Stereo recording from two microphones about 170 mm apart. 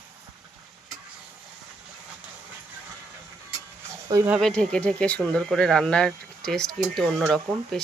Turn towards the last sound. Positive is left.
turn(degrees=0)  # may be behind; listen again after turning